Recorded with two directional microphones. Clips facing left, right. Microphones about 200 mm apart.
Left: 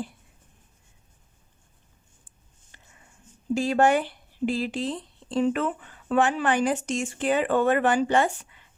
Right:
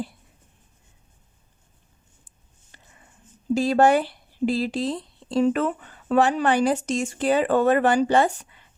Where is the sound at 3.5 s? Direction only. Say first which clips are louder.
Right 3 dB; 35° right (ahead or behind).